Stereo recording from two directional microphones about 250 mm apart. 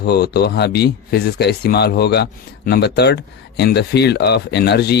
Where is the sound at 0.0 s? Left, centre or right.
Left.